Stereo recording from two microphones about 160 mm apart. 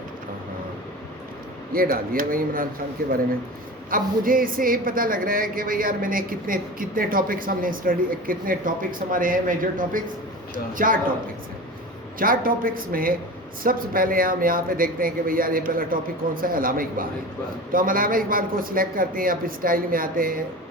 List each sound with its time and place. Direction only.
1.7 s a woman's voice: 65° right (ahead or behind)
3.8 s a woman's voice: 60° right (ahead or behind)
12.2 s a woman's voice: 60° right (ahead or behind)